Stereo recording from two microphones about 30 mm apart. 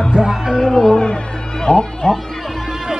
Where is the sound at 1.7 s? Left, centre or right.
Left.